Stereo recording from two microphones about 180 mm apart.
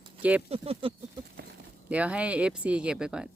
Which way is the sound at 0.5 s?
30° right (ahead or behind).